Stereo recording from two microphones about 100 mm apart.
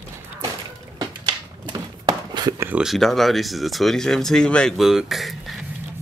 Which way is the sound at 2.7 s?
Centre (ahead or behind).